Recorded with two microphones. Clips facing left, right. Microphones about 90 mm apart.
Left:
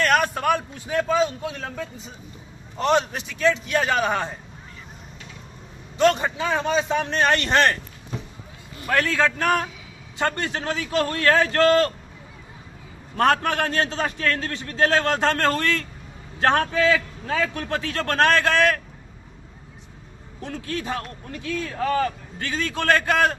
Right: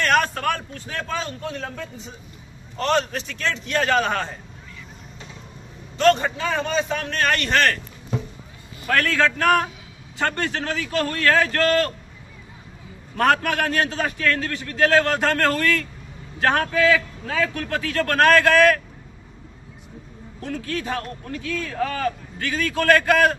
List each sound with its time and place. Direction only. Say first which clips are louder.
0.0 s a man's voice: even; 5° left (ahead or behind)
2.8 s a man's voice: left 1 dB; 15° left (ahead or behind)
5.9 s a man's voice: right 1 dB; 10° left (ahead or behind)
8.9 s a man's voice: right 1 dB; 20° left (ahead or behind)
13.1 s a man's voice: even; 25° left (ahead or behind)
20.4 s a man's voice: right 2 dB; 25° left (ahead or behind)